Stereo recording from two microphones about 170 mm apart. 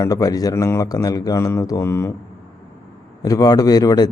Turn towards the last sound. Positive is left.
turn(degrees=25)  # may be behind; listen again after turning